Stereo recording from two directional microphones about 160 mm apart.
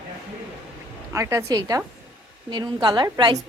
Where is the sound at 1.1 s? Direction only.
20° right (ahead or behind).